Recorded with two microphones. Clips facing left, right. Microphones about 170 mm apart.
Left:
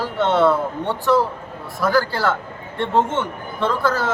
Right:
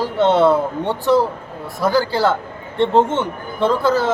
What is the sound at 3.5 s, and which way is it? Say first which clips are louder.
Speech: right 4 dB; 30° right (ahead or behind).